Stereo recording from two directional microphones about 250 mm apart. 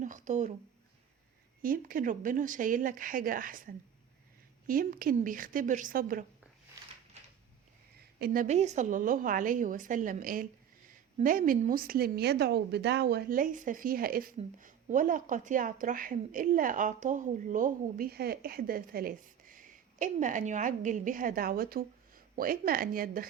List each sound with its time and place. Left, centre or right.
0.0 s a sound: right
1.6 s a woman's voice: right
8.2 s a woman's voice: right